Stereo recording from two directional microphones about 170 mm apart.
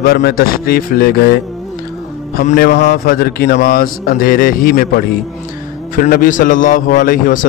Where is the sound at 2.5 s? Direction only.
65° left (ahead or behind).